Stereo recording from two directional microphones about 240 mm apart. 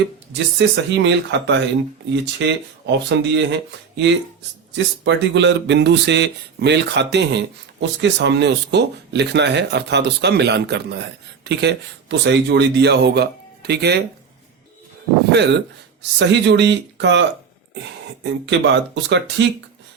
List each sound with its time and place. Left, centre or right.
0.9 s speech: right
15.3 s speech: right